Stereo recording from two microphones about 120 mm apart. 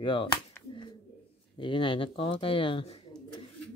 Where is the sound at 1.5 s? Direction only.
45° left (ahead or behind).